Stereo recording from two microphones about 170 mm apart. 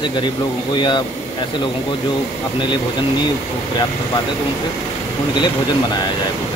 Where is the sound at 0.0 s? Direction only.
25° left (ahead or behind).